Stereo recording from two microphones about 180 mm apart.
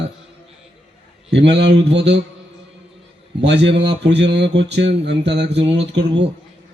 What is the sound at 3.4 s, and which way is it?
Speech, 75° right (ahead or behind).